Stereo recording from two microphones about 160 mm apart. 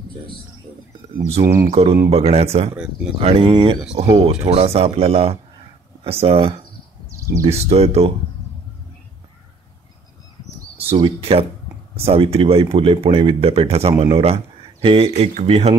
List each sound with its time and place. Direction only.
1.4 s speech: 20° right (ahead or behind)
1.7 s speech: 35° right (ahead or behind)
2.7 s speech: 5° right (ahead or behind)
3.2 s speech: 35° right (ahead or behind)
7.1 s a sound: 20° right (ahead or behind)
7.4 s speech: 40° right (ahead or behind)
10.9 s speech: 30° right (ahead or behind)